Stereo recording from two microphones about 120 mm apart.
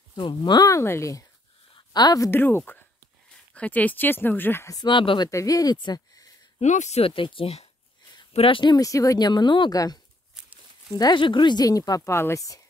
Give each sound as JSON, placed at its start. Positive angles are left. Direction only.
{"t": 0.1, "sound": "speech", "side_deg": 40}
{"t": 2.4, "sound": "speech", "side_deg": 15}
{"t": 4.7, "sound": "speech", "side_deg": 40}
{"t": 5.3, "sound": "speech", "side_deg": 30}
{"t": 6.6, "sound": "speech", "side_deg": 75}
{"t": 7.0, "sound": "speech", "side_deg": 45}
{"t": 8.7, "sound": "speech", "side_deg": 30}